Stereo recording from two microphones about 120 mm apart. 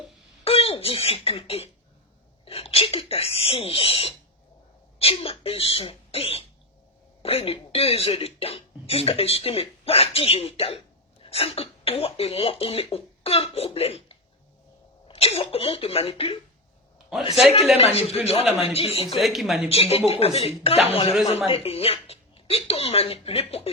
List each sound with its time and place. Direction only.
0.4 s a woman's voice: 55° left (ahead or behind)
17.7 s speech: 55° left (ahead or behind)
19.2 s speech: centre (ahead or behind)
19.6 s speech: 55° left (ahead or behind)